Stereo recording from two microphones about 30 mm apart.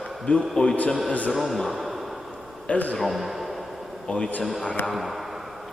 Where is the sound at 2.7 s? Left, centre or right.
Left.